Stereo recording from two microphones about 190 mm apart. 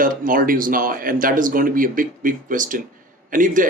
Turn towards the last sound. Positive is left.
turn(degrees=-45)  # may be behind; listen again after turning